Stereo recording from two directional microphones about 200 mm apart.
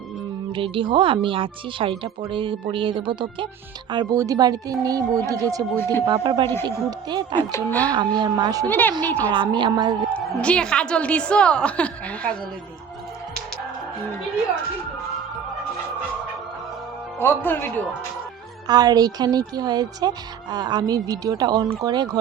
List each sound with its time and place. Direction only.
0.5 s speech: 25° right (ahead or behind)
5.7 s speech: 10° left (ahead or behind)
6.1 s speech: 25° right (ahead or behind)
7.5 s speech: 10° left (ahead or behind)
7.9 s speech: 20° right (ahead or behind)
8.6 s speech: 10° left (ahead or behind)
9.3 s speech: 25° right (ahead or behind)
10.2 s a woman's voice: 5° left (ahead or behind)
17.2 s speech: 10° left (ahead or behind)
18.7 s speech: 20° right (ahead or behind)